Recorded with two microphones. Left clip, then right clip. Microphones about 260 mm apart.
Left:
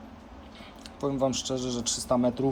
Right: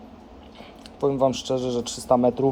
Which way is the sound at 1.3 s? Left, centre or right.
Centre.